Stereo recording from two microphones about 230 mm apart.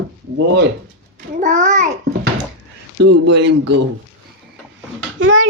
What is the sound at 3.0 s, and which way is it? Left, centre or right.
Speech, right.